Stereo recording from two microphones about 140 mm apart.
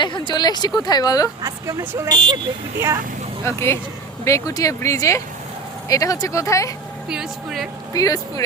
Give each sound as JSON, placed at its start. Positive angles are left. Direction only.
{"t": 0.0, "sound": "speech", "side_deg": 35}
{"t": 1.4, "sound": "speech", "side_deg": -25}
{"t": 2.0, "sound": "speech", "side_deg": -35}
{"t": 2.7, "sound": "speech", "side_deg": -20}
{"t": 3.4, "sound": "speech", "side_deg": 20}
{"t": 7.1, "sound": "speech", "side_deg": 0}
{"t": 7.9, "sound": "speech", "side_deg": 25}